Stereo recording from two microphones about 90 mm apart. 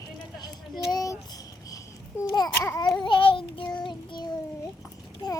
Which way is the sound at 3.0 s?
65° left (ahead or behind).